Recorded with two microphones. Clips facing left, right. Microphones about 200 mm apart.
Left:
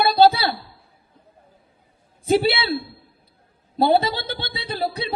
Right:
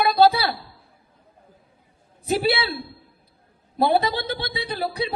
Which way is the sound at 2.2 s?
25° left (ahead or behind).